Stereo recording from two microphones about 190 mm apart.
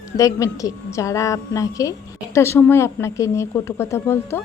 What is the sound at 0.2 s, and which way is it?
A woman's voice, 15° left (ahead or behind).